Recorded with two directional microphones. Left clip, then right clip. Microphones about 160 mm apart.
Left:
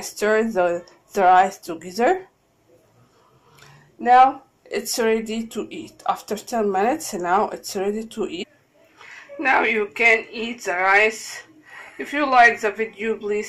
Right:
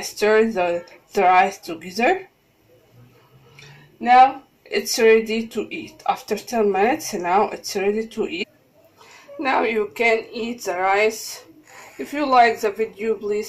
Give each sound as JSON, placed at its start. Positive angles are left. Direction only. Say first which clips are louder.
{"t": 0.0, "sound": "speech", "louder": "right 3 dB", "side_deg": 5}
{"t": 4.0, "sound": "speech", "louder": "right 1 dB", "side_deg": 15}
{"t": 4.6, "sound": "speech", "louder": "right 5 dB", "side_deg": 0}
{"t": 8.9, "sound": "a woman's voice", "louder": "left 1 dB", "side_deg": -10}